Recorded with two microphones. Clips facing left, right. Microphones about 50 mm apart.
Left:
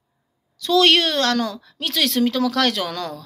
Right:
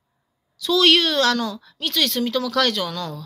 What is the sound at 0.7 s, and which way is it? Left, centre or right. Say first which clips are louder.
A woman's voice: left 1 dB; left.